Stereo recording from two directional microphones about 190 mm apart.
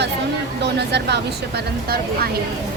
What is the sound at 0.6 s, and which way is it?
A woman's voice, 60° right (ahead or behind).